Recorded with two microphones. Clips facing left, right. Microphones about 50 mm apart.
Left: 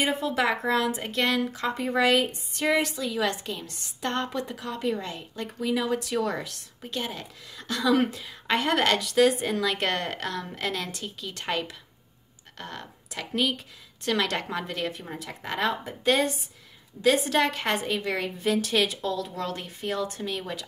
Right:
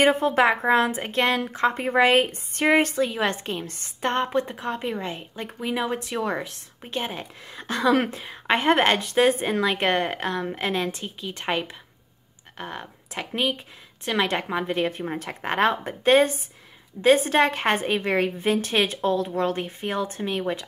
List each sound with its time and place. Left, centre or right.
0.0 s a woman's voice: right